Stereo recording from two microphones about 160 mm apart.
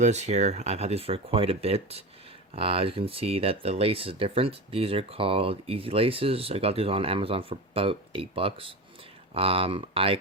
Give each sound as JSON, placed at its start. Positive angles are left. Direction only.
{"t": 0.0, "sound": "speech", "side_deg": -45}